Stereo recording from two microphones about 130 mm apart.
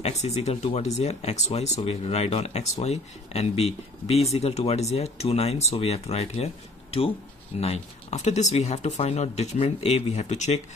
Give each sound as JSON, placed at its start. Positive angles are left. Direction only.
{"t": 0.2, "sound": "speech", "side_deg": 55}